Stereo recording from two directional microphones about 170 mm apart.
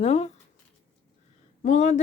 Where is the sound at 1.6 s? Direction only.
45° left (ahead or behind).